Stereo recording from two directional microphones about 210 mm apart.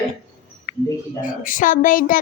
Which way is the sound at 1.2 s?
40° left (ahead or behind).